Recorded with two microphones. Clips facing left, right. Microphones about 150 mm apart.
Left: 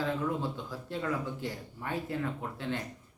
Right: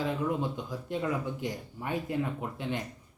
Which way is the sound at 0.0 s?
15° right (ahead or behind).